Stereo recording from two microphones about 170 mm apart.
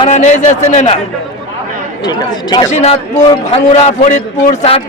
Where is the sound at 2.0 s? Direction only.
25° left (ahead or behind).